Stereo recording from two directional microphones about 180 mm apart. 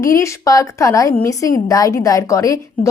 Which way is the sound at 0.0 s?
15° left (ahead or behind).